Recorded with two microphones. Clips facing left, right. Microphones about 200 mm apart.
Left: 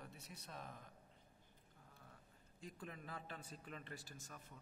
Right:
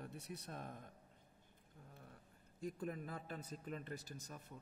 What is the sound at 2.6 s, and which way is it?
A man's voice, 50° right (ahead or behind).